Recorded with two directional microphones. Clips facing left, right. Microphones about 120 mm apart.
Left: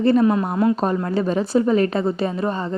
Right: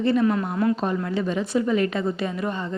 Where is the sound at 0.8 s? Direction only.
40° left (ahead or behind).